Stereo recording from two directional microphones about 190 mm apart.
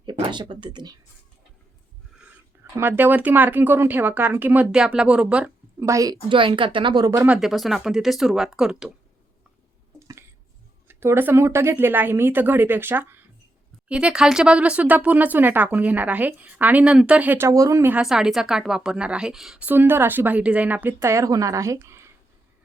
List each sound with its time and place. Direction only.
0.0 s speech: 25° right (ahead or behind)
2.1 s speech: 10° right (ahead or behind)
5.8 s a woman's voice: 15° right (ahead or behind)
7.3 s speech: centre (ahead or behind)
10.8 s speech: 10° right (ahead or behind)